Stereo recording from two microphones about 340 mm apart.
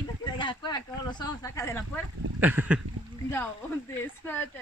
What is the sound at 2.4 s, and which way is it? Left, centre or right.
Speech, centre.